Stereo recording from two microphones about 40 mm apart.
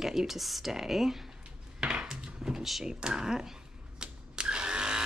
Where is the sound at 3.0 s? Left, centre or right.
Right.